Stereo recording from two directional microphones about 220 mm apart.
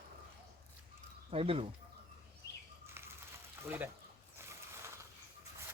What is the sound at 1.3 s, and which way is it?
Speech, 25° right (ahead or behind).